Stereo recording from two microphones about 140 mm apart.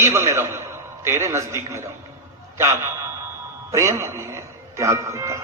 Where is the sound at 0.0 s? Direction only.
20° right (ahead or behind).